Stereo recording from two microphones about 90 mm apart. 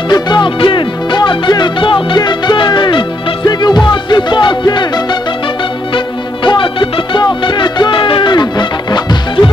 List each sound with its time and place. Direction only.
0.1 s music: 55° left (ahead or behind)
2.1 s music: 55° left (ahead or behind)